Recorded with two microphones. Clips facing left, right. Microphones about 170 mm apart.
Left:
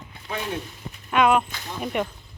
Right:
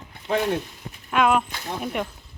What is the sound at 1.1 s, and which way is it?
Speech, centre (ahead or behind).